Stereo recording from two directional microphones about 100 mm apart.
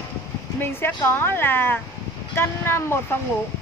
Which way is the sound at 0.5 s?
20° left (ahead or behind).